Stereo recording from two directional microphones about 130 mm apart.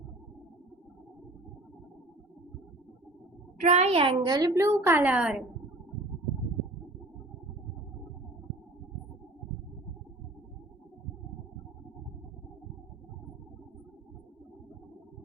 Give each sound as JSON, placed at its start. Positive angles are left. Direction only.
{"t": 3.6, "sound": "a child's voice", "side_deg": -60}
{"t": 4.2, "sound": "a woman's voice", "side_deg": -30}